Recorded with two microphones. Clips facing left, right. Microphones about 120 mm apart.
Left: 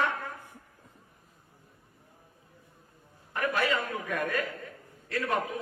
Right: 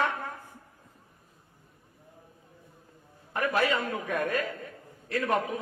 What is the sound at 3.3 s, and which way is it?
A man's voice, 25° right (ahead or behind).